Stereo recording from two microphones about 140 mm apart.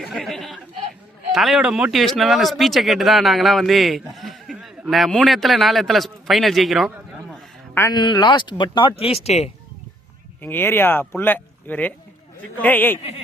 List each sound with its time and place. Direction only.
0.1 s a sound: centre (ahead or behind)
1.3 s speech: centre (ahead or behind)
7.9 s speech: 30° left (ahead or behind); by 9.5 s 50° left (ahead or behind)
10.4 s speech: 15° left (ahead or behind)
13.0 s speech: 45° left (ahead or behind)